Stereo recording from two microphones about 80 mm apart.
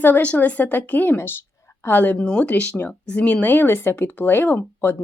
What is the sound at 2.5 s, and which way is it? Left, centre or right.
Speech, left.